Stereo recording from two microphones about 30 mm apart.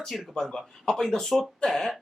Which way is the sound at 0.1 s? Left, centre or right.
Centre.